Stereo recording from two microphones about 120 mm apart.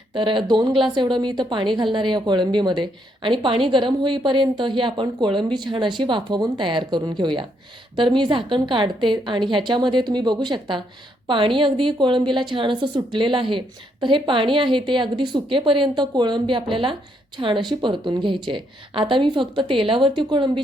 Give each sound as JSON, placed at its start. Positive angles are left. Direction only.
{"t": 0.1, "sound": "a woman's voice", "side_deg": -45}